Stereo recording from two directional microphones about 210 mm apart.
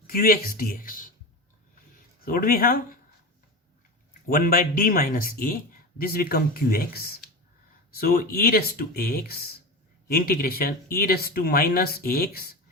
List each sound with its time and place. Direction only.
0.1 s speech: 45° left (ahead or behind)
2.2 s speech: 45° left (ahead or behind)
4.3 s speech: 45° left (ahead or behind)